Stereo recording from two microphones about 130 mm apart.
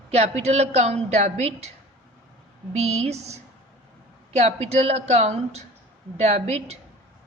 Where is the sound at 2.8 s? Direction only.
55° right (ahead or behind).